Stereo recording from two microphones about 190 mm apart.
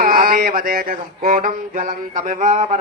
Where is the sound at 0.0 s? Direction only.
50° right (ahead or behind).